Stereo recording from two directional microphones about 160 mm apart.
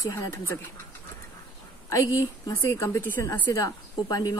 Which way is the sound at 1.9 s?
20° left (ahead or behind).